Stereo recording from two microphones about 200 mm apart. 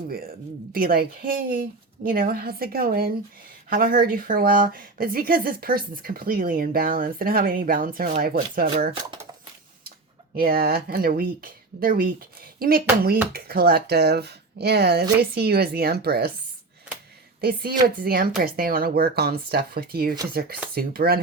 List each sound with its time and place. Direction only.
0.1 s speech: 50° right (ahead or behind)
10.3 s speech: 50° right (ahead or behind)
17.4 s speech: 50° right (ahead or behind)